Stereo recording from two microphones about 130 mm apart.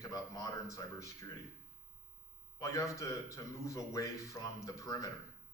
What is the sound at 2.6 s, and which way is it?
A man's voice, 25° left (ahead or behind).